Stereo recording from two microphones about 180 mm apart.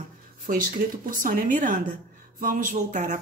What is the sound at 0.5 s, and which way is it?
Speech, 50° right (ahead or behind).